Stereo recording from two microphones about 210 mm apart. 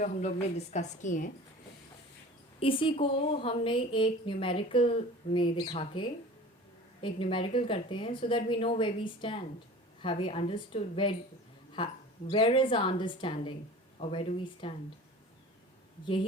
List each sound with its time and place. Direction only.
0.0 s a woman's voice: 35° left (ahead or behind)
2.6 s a woman's voice: 25° left (ahead or behind)